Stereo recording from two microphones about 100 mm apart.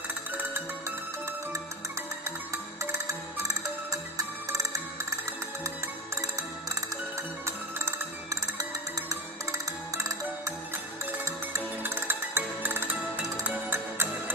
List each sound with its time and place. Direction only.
2.8 s music: 35° right (ahead or behind)
7.4 s music: 25° right (ahead or behind)